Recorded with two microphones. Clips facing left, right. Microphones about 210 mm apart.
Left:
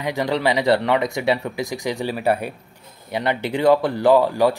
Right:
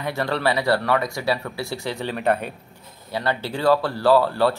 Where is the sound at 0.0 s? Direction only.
15° left (ahead or behind).